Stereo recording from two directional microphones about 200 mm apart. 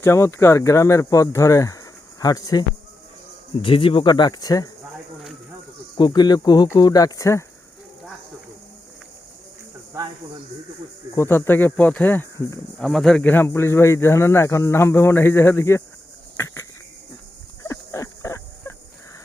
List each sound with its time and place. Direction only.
0.0 s speech: 15° left (ahead or behind)
6.0 s speech: 20° left (ahead or behind)
11.1 s speech: 15° left (ahead or behind)
17.6 s a sound: 15° left (ahead or behind)